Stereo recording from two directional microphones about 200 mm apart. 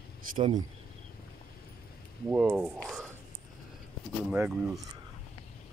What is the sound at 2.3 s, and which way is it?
Speech, 10° right (ahead or behind).